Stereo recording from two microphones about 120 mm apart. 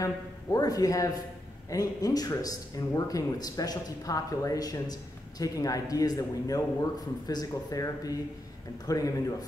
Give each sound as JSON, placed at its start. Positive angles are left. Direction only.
{"t": 0.0, "sound": "a man's voice", "side_deg": 30}